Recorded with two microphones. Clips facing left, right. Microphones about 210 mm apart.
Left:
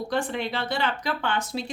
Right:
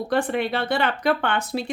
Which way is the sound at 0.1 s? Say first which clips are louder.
Right 6 dB; 60° right (ahead or behind).